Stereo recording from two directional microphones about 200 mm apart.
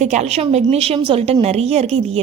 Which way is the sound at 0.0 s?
35° right (ahead or behind).